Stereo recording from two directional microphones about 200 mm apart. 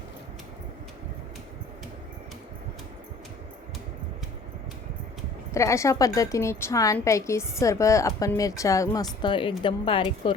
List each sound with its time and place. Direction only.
5.5 s a woman's voice: 15° left (ahead or behind)